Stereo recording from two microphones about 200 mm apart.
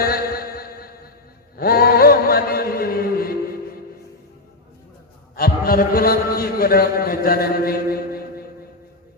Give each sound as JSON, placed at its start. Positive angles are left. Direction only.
{"t": 0.0, "sound": "a sound", "side_deg": 50}
{"t": 1.5, "sound": "mantra", "side_deg": 50}
{"t": 5.4, "sound": "a man's voice", "side_deg": 45}